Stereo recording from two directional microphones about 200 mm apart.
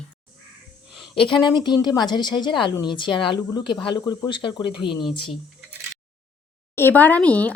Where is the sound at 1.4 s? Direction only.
20° left (ahead or behind).